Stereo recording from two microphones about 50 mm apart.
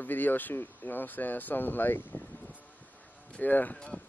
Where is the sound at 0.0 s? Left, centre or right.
Left.